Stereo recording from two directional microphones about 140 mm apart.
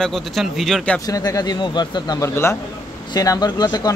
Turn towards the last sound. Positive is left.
turn(degrees=30)  # may be behind; listen again after turning